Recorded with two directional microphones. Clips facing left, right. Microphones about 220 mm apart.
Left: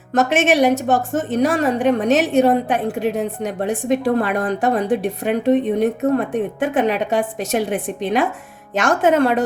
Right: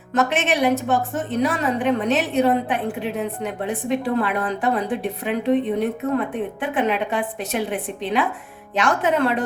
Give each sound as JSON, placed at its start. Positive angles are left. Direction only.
{"t": 0.2, "sound": "a woman's voice", "side_deg": 45}